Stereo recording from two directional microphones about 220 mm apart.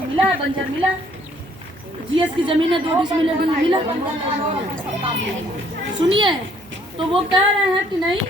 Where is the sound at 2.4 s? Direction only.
25° right (ahead or behind).